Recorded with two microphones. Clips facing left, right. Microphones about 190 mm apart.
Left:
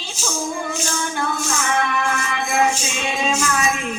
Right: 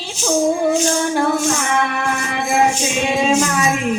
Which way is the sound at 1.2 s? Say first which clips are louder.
Right 7 dB; 45° right (ahead or behind).